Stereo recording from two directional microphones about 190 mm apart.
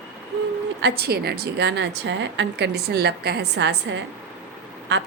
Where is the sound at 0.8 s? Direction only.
60° right (ahead or behind).